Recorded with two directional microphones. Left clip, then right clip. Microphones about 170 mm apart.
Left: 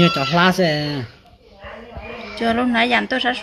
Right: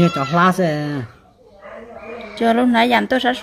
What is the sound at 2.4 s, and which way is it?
Speech, 40° right (ahead or behind).